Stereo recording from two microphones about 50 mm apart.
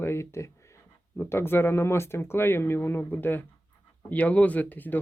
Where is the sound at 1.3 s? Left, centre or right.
Left.